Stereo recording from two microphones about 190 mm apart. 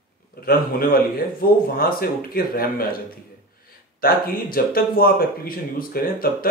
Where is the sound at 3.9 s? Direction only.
50° left (ahead or behind).